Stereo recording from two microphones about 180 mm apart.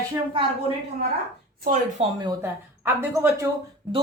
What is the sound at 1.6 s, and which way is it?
Speech, 45° right (ahead or behind).